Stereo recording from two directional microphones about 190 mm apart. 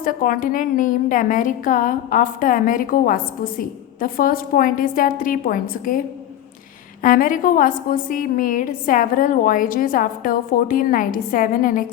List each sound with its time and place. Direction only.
0.0 s a woman's voice: 45° left (ahead or behind)
7.0 s a woman's voice: 45° left (ahead or behind)